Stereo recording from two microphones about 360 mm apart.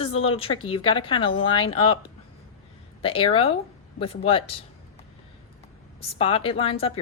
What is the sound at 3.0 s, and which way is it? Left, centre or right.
Speech, centre.